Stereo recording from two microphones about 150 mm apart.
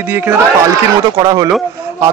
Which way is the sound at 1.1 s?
25° right (ahead or behind).